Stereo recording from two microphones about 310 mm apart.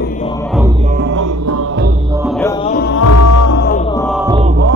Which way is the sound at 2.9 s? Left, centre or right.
Left.